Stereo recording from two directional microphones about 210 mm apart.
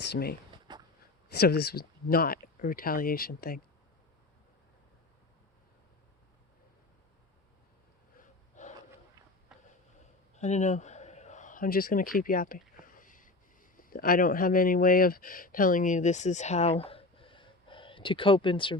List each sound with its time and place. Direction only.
0.0 s speech: 50° left (ahead or behind)
0.7 s a sound: 20° right (ahead or behind)
1.3 s speech: 50° left (ahead or behind)
8.2 s snort: 35° left (ahead or behind)
10.3 s a man's voice: 35° left (ahead or behind)
16.8 s a sound: 25° left (ahead or behind)